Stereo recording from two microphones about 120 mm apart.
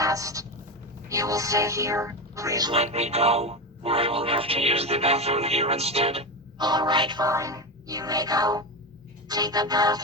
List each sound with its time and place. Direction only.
0.0 s a sound: 30° right (ahead or behind)
1.0 s speech: 30° right (ahead or behind)
2.7 s speech: 65° right (ahead or behind)
6.6 s music: 35° right (ahead or behind)
7.3 s music: 25° right (ahead or behind)